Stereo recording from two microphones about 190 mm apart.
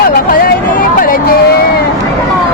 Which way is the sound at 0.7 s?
50° left (ahead or behind).